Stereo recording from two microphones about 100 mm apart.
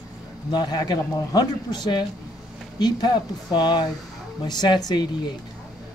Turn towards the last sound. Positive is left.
turn(degrees=45)  # may be behind; listen again after turning